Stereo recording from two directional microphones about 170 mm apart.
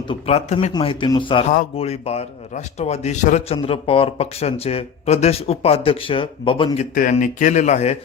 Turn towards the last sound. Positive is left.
turn(degrees=40)  # may be behind; listen again after turning